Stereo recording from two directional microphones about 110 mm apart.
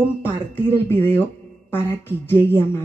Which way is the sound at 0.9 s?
20° left (ahead or behind).